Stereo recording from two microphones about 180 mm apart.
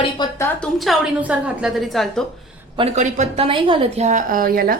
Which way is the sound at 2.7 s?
35° right (ahead or behind).